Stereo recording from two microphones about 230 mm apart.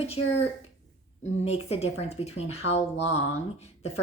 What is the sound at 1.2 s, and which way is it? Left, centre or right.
Speech, left.